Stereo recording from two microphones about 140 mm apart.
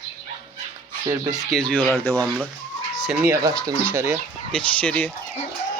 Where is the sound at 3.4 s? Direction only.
25° right (ahead or behind).